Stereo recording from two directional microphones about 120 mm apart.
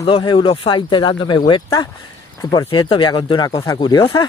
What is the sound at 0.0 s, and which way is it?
Speech, 40° left (ahead or behind).